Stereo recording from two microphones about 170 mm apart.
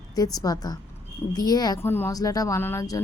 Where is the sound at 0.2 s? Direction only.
20° left (ahead or behind).